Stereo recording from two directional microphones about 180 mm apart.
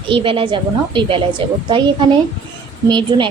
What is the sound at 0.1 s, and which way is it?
A woman's voice, 30° right (ahead or behind).